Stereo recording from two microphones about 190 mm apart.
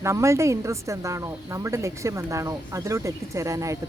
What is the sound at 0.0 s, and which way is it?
Speech, 15° right (ahead or behind).